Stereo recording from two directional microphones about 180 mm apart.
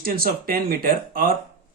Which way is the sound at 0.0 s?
55° right (ahead or behind).